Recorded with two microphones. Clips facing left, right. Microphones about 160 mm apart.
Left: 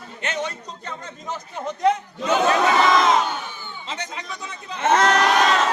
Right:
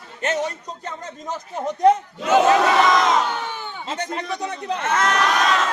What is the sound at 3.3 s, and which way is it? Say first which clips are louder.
Crowd: right 4 dB; 80° right.